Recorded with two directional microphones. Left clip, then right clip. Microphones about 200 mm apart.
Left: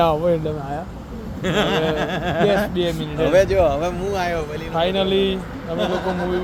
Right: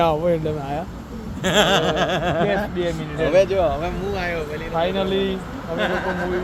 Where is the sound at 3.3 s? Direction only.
50° left (ahead or behind).